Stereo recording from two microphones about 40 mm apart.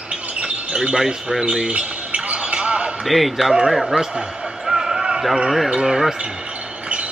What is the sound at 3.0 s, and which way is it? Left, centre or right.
A man's voice, centre.